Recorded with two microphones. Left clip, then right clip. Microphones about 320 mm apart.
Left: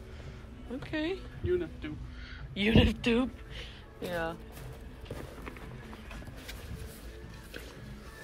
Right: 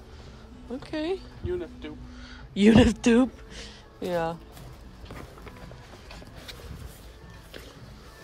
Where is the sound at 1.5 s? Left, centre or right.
Right.